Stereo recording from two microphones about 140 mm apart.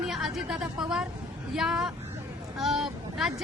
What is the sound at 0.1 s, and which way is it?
A woman's voice, 5° right (ahead or behind).